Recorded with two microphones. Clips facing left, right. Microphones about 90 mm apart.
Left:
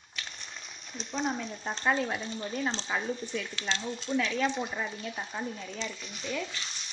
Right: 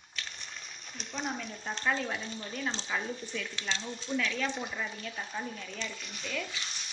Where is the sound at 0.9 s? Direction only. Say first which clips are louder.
Left 5 dB; 20° left (ahead or behind).